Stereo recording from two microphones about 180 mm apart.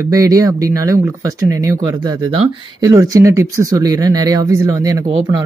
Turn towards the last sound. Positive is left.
turn(degrees=-20)  # may be behind; listen again after turning